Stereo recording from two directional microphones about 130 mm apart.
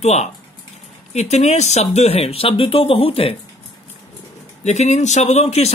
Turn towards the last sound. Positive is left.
turn(degrees=55)  # may be behind; listen again after turning